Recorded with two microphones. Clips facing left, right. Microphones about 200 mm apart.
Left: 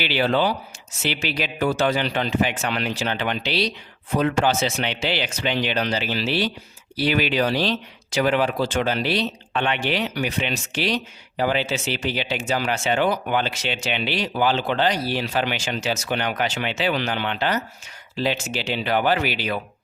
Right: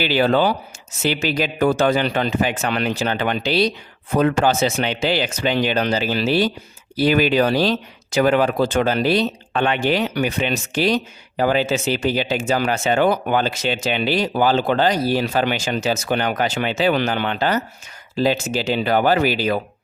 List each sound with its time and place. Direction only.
0.0 s speech: 45° right (ahead or behind)